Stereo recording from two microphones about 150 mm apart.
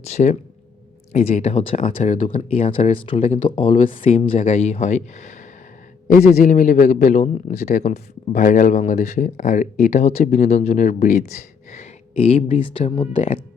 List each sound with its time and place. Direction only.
0.0 s speech: 50° left (ahead or behind)